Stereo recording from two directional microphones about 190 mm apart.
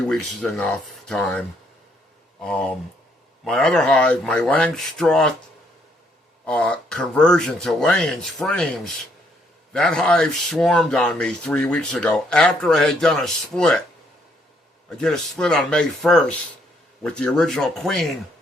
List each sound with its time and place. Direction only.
0.1 s speech: 5° left (ahead or behind)
6.4 s speech: 5° left (ahead or behind)
9.7 s speech: 5° left (ahead or behind)
14.8 s speech: 5° left (ahead or behind)